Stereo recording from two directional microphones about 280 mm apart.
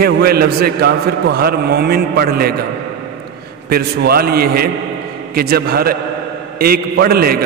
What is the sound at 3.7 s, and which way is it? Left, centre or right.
A man's voice, right.